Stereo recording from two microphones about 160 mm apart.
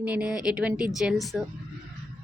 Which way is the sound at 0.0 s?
5° right (ahead or behind).